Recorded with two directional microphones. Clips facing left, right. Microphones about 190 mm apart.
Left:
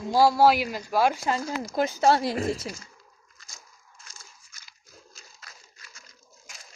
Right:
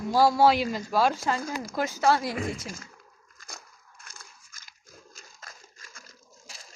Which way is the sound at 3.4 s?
60° right (ahead or behind).